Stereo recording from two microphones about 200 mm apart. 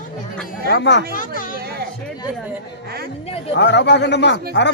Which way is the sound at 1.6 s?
50° right (ahead or behind).